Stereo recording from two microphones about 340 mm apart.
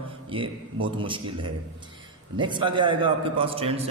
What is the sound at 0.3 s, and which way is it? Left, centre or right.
A man's voice, centre.